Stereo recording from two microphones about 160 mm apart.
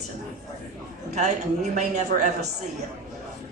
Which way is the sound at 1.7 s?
50° right (ahead or behind).